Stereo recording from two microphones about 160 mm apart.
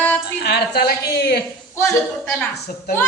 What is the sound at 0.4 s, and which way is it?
Speech, 90° left.